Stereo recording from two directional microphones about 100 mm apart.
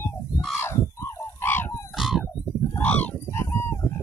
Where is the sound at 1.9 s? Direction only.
5° right (ahead or behind).